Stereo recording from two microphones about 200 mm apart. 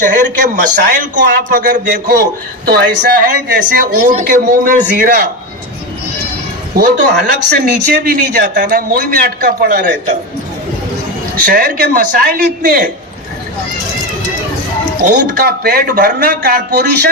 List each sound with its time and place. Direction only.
0.0 s a man's voice: 40° right (ahead or behind)
6.7 s a man's voice: 50° right (ahead or behind)
11.4 s a man's voice: 45° right (ahead or behind)
15.0 s a man's voice: 50° right (ahead or behind)